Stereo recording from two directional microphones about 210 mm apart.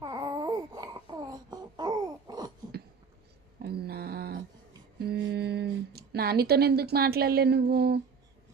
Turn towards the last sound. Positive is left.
turn(degrees=-50)  # may be behind; listen again after turning